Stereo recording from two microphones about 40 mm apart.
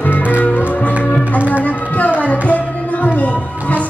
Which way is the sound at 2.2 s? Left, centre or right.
Left.